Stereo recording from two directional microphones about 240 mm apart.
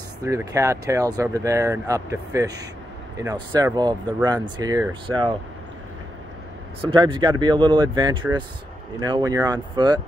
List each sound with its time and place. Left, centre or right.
0.2 s speech: centre
6.8 s speech: right